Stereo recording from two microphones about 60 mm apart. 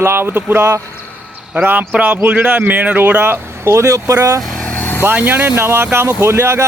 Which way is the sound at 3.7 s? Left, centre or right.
Right.